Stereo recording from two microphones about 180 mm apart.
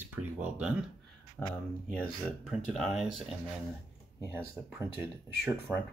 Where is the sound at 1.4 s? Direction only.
5° left (ahead or behind).